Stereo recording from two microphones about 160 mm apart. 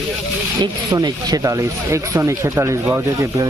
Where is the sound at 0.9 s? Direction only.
25° right (ahead or behind).